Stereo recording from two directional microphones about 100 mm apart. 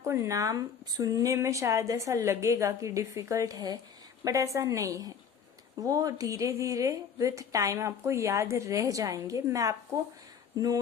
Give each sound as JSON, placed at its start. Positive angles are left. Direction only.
{"t": 0.0, "sound": "a woman's voice", "side_deg": -30}